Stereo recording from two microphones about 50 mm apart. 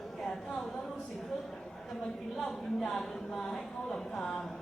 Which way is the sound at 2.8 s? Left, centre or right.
Centre.